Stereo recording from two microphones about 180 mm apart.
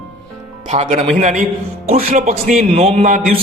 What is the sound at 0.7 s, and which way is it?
A man's voice, 40° right (ahead or behind).